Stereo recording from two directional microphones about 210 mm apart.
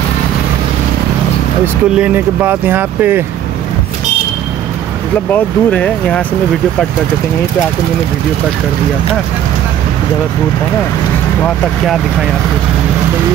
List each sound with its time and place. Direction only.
2.0 s speech: 10° right (ahead or behind)
5.3 s speech: 5° left (ahead or behind)
11.4 s speech: centre (ahead or behind)